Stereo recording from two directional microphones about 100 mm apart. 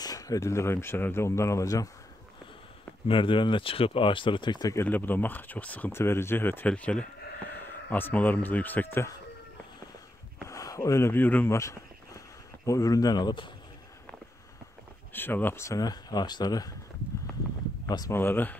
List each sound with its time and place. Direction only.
0.0 s speech: 35° left (ahead or behind)
3.1 s speech: 55° left (ahead or behind)
4.8 s speech: 20° left (ahead or behind)
10.5 s speech: 35° left (ahead or behind); by 11.5 s 20° left (ahead or behind)
11.5 s a sound: 30° left (ahead or behind)
12.6 s speech: 35° left (ahead or behind)
15.1 s speech: 20° left (ahead or behind); by 16.7 s 40° left (ahead or behind)
17.8 s speech: 40° left (ahead or behind)
18.1 s speech: 20° left (ahead or behind)